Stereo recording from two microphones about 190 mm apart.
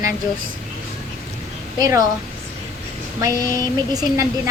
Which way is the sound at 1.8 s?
20° right (ahead or behind).